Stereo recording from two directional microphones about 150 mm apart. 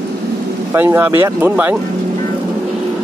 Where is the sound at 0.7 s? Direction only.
15° right (ahead or behind).